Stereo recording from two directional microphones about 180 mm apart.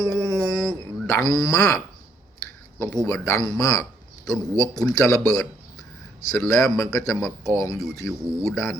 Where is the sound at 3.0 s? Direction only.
20° left (ahead or behind).